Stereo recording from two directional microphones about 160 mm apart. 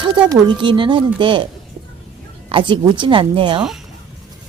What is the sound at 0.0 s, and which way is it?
Speech, 30° right (ahead or behind).